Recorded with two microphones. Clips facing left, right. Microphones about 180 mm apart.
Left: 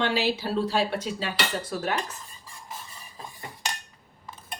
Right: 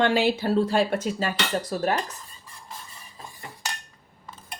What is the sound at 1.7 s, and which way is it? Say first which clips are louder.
Speech: right 4 dB; 35° right (ahead or behind).